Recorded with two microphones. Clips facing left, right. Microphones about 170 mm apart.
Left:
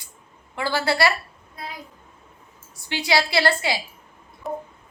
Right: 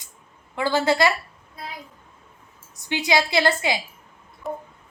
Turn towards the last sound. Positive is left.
turn(degrees=0)  # may be behind; listen again after turning